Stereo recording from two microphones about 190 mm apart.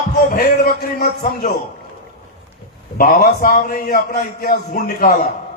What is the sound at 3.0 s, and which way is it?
A man's voice, 50° left (ahead or behind).